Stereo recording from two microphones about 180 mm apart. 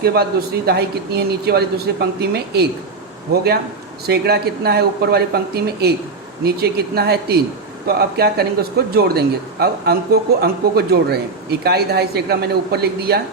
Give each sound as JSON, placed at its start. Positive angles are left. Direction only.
{"t": 0.0, "sound": "a man's voice", "side_deg": -60}
{"t": 4.0, "sound": "a man's voice", "side_deg": -60}